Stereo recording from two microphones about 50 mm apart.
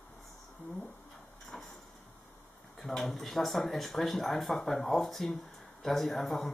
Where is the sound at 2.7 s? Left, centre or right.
Centre.